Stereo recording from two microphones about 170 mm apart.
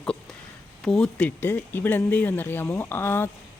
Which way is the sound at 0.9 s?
5° left (ahead or behind).